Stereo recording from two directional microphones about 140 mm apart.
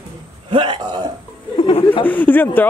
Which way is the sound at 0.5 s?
35° right (ahead or behind).